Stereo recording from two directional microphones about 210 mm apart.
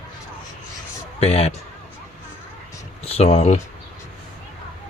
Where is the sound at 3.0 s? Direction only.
30° left (ahead or behind).